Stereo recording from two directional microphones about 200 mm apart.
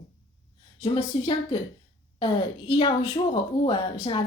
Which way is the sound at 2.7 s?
25° left (ahead or behind).